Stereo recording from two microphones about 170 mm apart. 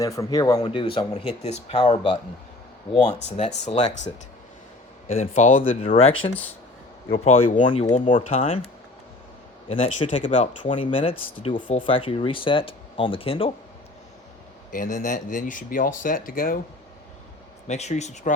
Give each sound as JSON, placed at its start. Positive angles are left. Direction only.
{"t": 0.0, "sound": "speech", "side_deg": 20}
{"t": 3.2, "sound": "speech", "side_deg": 35}
{"t": 5.8, "sound": "speech", "side_deg": 35}
{"t": 9.6, "sound": "speech", "side_deg": 35}
{"t": 10.6, "sound": "speech", "side_deg": 30}
{"t": 14.7, "sound": "speech", "side_deg": 50}
{"t": 17.7, "sound": "speech", "side_deg": 40}